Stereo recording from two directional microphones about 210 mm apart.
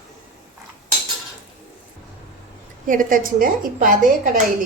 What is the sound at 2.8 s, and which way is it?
A woman's voice, 40° right (ahead or behind).